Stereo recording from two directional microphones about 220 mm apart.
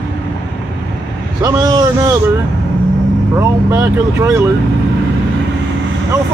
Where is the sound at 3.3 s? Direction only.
15° right (ahead or behind).